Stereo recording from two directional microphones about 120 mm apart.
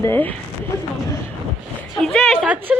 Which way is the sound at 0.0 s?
15° left (ahead or behind).